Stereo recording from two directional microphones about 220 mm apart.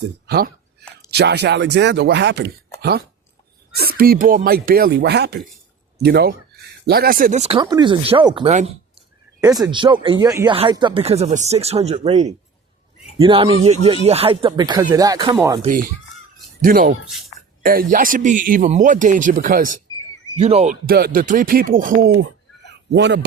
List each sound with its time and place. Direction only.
0.0 s speech: 45° right (ahead or behind)
3.8 s speech: 45° right (ahead or behind); by 8.4 s 20° right (ahead or behind)
8.4 s speech: 35° right (ahead or behind)
9.4 s speech: 15° right (ahead or behind)
15.6 s speech: 40° right (ahead or behind)
20.8 s speech: 45° right (ahead or behind)
22.9 s speech: 55° right (ahead or behind)